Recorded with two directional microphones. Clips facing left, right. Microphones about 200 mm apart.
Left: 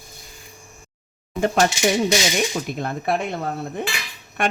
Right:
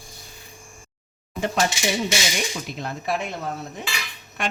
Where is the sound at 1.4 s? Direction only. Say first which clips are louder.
Left 5 dB; 50° left (ahead or behind).